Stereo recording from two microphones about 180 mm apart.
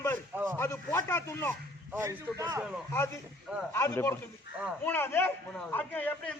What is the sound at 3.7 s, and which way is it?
A man's voice, 15° left (ahead or behind).